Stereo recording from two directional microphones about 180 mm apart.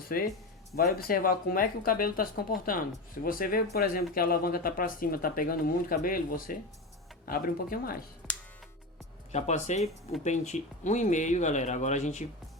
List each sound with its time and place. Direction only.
0.1 s speech: 55° left (ahead or behind)
8.2 s music: centre (ahead or behind)
9.3 s speech: 40° left (ahead or behind)